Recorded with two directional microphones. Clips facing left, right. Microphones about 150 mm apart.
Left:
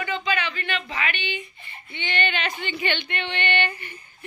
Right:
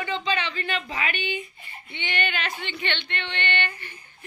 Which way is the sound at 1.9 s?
10° right (ahead or behind).